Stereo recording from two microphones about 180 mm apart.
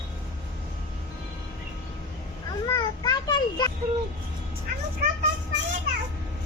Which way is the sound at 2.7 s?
20° left (ahead or behind).